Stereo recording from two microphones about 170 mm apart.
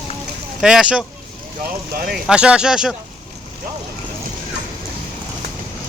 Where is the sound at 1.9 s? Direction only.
60° right (ahead or behind).